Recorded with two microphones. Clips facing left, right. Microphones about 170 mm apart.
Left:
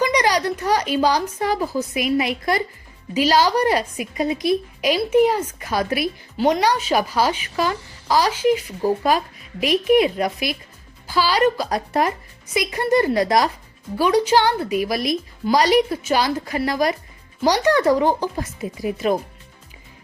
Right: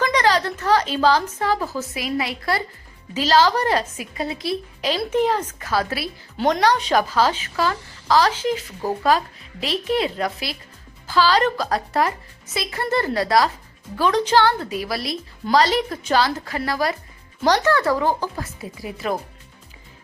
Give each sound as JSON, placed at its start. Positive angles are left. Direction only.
{"t": 0.0, "sound": "a woman's voice", "side_deg": 15}